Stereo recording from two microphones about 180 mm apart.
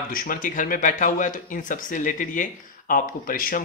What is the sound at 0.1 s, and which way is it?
Speech, 50° left (ahead or behind).